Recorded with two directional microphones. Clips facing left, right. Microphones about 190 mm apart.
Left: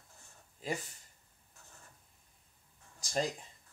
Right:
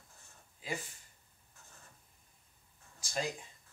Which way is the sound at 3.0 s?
35° left (ahead or behind).